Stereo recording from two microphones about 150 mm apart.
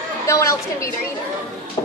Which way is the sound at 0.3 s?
20° left (ahead or behind).